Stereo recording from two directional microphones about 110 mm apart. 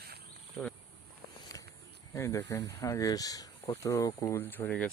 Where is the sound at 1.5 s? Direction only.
30° left (ahead or behind).